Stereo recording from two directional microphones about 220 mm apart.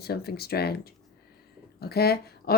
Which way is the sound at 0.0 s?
45° left (ahead or behind).